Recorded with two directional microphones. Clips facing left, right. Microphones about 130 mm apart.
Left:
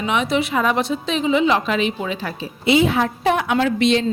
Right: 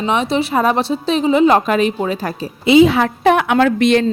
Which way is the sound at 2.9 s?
80° right.